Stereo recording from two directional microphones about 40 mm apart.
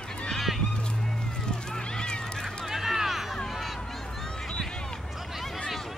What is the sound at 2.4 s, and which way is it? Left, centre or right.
Run, centre.